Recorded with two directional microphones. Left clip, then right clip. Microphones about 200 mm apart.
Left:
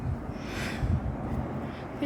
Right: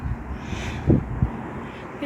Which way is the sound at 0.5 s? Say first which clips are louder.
Right 2 dB; 5° left (ahead or behind).